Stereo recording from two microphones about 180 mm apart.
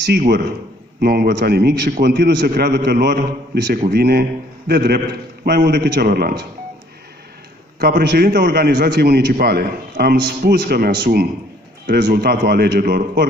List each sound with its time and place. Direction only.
1.0 s a man's voice: 60° right (ahead or behind)
7.8 s a man's voice: 60° right (ahead or behind)